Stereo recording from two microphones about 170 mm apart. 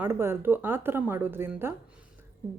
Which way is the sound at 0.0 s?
15° right (ahead or behind).